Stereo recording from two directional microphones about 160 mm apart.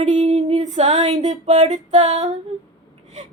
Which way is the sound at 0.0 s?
45° right (ahead or behind).